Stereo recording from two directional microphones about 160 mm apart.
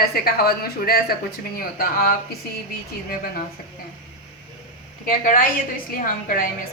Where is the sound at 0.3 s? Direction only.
75° left (ahead or behind).